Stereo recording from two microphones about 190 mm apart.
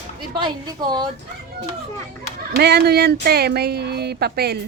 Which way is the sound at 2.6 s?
55° right (ahead or behind).